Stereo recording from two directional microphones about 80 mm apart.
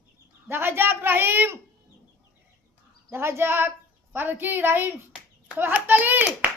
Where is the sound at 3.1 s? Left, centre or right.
Right.